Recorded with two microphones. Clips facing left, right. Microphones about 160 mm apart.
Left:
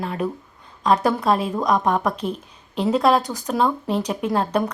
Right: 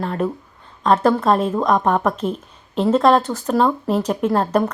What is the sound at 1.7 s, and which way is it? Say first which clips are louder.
Speech: right 1 dB; 35° right (ahead or behind).